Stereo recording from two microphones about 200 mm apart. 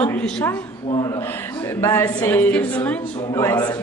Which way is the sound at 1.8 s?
10° left (ahead or behind).